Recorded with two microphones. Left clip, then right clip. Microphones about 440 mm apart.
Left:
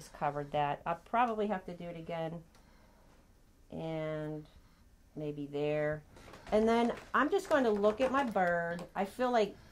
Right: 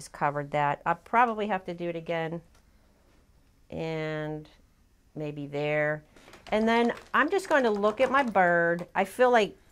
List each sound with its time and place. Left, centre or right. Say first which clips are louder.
0.0 s speech: right 7 dB; right
3.7 s speech: right 6 dB; right
6.5 s speech: right 4 dB; right